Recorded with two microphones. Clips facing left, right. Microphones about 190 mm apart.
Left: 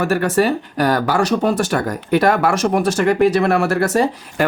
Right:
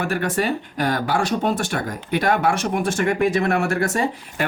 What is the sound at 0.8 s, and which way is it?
Speech, 40° left (ahead or behind).